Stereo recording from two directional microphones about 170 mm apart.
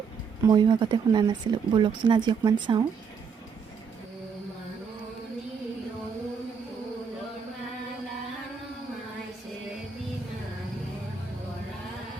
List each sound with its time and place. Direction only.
0.4 s speech: 25° right (ahead or behind)